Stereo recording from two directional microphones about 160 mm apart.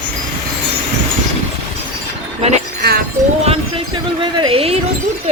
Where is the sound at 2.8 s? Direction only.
75° right (ahead or behind).